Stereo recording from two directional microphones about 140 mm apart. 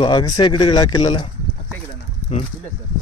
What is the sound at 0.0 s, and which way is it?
Speech, 30° left (ahead or behind).